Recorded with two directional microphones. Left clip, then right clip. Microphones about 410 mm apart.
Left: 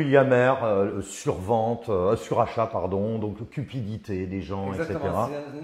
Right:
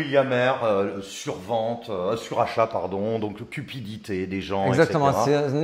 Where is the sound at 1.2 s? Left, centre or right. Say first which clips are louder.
Left 2 dB; left.